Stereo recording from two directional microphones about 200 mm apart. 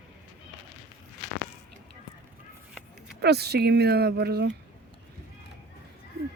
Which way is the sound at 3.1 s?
55° right (ahead or behind).